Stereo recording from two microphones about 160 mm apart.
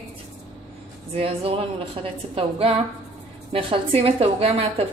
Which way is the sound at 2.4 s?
35° right (ahead or behind).